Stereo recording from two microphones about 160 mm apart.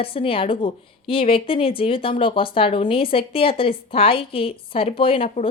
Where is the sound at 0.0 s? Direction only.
35° left (ahead or behind).